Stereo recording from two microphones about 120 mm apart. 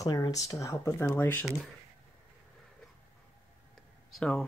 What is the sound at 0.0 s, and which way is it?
Speech, 30° left (ahead or behind).